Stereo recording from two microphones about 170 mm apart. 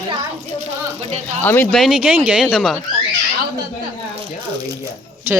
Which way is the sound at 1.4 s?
10° left (ahead or behind).